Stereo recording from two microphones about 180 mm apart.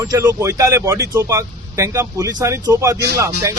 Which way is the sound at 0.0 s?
20° right (ahead or behind).